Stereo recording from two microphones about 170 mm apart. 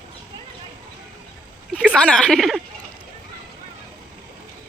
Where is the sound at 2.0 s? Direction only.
5° left (ahead or behind).